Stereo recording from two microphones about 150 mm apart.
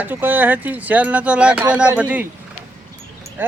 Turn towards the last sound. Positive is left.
turn(degrees=-15)  # may be behind; listen again after turning